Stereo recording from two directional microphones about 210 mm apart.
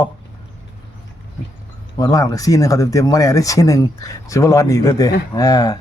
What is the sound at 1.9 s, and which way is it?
Speech, 15° left (ahead or behind).